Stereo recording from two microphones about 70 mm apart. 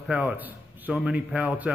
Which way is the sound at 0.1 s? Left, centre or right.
Right.